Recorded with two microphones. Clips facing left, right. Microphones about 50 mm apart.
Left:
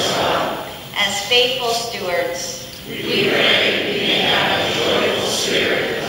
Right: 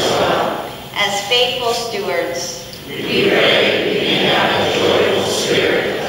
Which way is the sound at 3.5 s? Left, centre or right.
Centre.